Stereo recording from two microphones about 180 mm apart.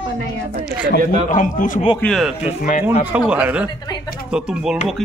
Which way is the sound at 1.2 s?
45° left (ahead or behind).